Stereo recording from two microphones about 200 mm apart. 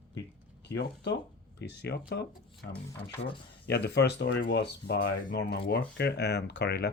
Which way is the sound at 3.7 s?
55° left (ahead or behind).